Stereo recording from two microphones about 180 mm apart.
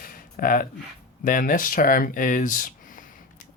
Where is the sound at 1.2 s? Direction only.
45° left (ahead or behind).